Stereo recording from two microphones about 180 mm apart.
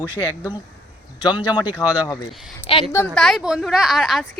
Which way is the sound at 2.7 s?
30° left (ahead or behind).